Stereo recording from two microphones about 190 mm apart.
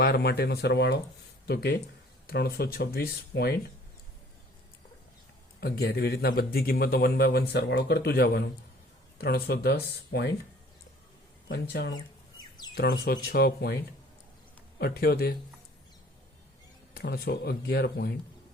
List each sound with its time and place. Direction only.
0.0 s a man's voice: 55° left (ahead or behind)
5.5 s a man's voice: 55° left (ahead or behind)
11.4 s a man's voice: 55° left (ahead or behind)
12.4 s a sound: 20° left (ahead or behind)
12.7 s a man's voice: 55° left (ahead or behind)
14.8 s a man's voice: 55° left (ahead or behind)
16.9 s a man's voice: 55° left (ahead or behind)